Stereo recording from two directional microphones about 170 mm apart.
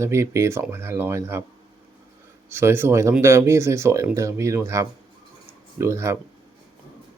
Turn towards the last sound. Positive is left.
turn(degrees=-15)  # may be behind; listen again after turning